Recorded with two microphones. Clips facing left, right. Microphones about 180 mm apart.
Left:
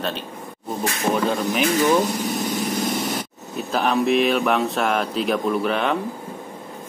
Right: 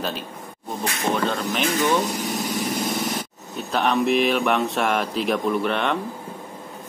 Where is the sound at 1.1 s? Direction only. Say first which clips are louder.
Left 3 dB; 5° left (ahead or behind).